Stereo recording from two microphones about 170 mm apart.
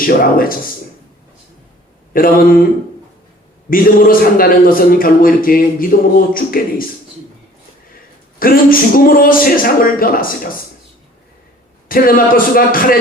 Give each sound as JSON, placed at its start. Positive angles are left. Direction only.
{"t": 0.0, "sound": "a man's voice", "side_deg": 60}
{"t": 2.1, "sound": "a man's voice", "side_deg": 55}
{"t": 3.7, "sound": "a man's voice", "side_deg": 55}
{"t": 8.4, "sound": "a man's voice", "side_deg": 55}
{"t": 11.9, "sound": "a man's voice", "side_deg": 55}